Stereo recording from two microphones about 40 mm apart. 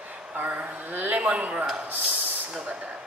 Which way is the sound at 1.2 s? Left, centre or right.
Right.